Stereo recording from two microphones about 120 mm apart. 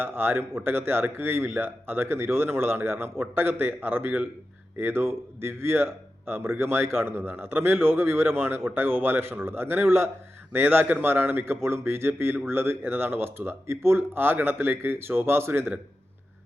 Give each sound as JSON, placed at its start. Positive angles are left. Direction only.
{"t": 0.0, "sound": "a man's voice", "side_deg": -20}